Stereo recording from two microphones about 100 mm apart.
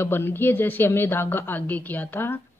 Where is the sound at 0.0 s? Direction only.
25° left (ahead or behind).